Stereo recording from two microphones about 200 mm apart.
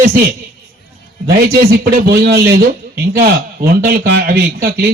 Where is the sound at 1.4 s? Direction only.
50° right (ahead or behind).